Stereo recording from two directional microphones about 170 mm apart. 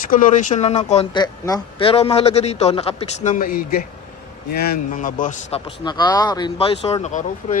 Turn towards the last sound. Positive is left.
turn(degrees=45)  # may be behind; listen again after turning